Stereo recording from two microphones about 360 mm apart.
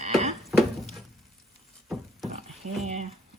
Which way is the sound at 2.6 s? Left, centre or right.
Right.